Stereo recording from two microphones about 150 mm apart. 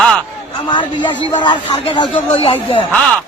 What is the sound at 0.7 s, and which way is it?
Speech, 30° left (ahead or behind).